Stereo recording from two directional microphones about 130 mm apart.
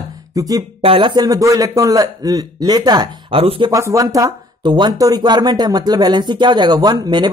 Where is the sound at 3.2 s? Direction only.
45° right (ahead or behind).